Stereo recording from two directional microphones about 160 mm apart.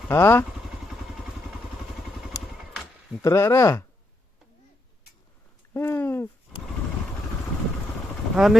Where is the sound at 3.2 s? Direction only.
20° left (ahead or behind).